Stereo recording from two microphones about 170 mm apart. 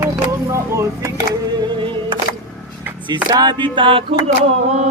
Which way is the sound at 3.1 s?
25° right (ahead or behind).